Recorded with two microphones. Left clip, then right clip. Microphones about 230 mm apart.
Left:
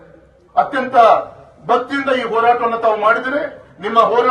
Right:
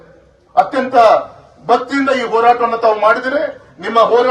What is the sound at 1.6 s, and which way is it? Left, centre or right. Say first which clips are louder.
A man's voice: right 3 dB; right.